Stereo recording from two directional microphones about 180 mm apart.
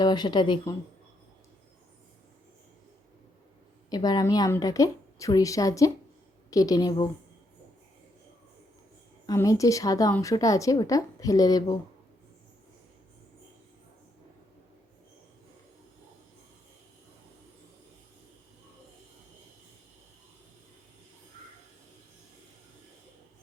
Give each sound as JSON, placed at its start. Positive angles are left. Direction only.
{"t": 0.0, "sound": "speech", "side_deg": 25}
{"t": 3.8, "sound": "speech", "side_deg": 20}
{"t": 9.2, "sound": "speech", "side_deg": 20}